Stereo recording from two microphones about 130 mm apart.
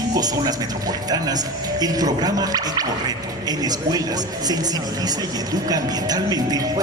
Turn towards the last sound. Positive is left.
turn(degrees=-30)  # may be behind; listen again after turning